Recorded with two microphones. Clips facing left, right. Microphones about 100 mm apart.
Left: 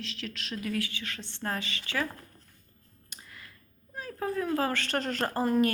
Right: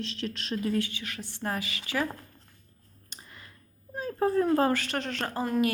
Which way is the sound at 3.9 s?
30° right (ahead or behind).